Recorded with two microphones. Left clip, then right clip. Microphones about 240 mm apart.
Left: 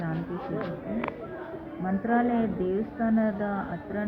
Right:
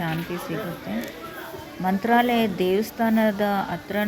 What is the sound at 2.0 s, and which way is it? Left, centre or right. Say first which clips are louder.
Speech: right 6 dB; right.